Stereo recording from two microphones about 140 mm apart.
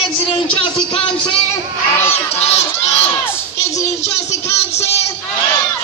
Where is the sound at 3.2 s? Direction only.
20° left (ahead or behind).